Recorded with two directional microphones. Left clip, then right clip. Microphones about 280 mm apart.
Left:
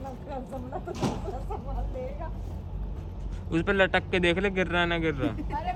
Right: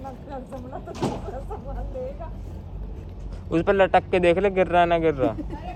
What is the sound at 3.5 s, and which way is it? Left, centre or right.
Speech, centre.